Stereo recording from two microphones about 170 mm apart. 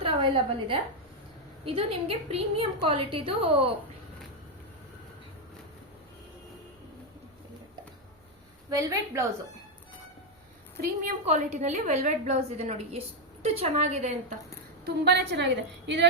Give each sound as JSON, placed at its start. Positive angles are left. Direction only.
{"t": 0.0, "sound": "a woman's voice", "side_deg": -30}
{"t": 8.7, "sound": "a woman's voice", "side_deg": -20}
{"t": 10.8, "sound": "a woman's voice", "side_deg": -50}
{"t": 14.8, "sound": "a woman's voice", "side_deg": -80}